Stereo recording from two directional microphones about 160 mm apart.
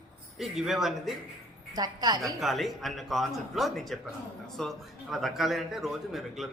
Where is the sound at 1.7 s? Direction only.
25° right (ahead or behind).